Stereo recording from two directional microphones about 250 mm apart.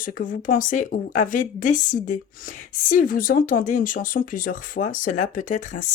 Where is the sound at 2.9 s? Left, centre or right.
Left.